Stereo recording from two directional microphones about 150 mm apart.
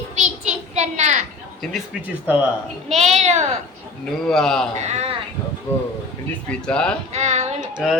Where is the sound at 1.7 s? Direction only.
10° right (ahead or behind).